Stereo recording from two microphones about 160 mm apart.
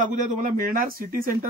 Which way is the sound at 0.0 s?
55° right (ahead or behind).